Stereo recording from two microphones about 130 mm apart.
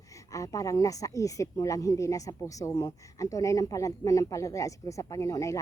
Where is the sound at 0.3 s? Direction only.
25° left (ahead or behind).